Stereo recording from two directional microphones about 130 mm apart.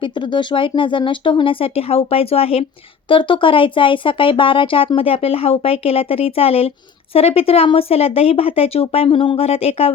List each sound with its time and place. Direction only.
0.3 s speech: 40° left (ahead or behind)